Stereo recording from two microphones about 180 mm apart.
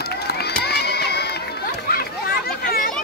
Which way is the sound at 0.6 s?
60° left (ahead or behind).